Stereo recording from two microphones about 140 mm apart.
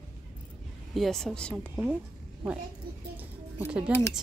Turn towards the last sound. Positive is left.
turn(degrees=-5)  # may be behind; listen again after turning